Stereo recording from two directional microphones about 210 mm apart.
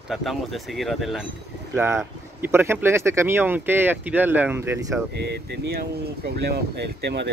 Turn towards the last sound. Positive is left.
turn(degrees=-55)  # may be behind; listen again after turning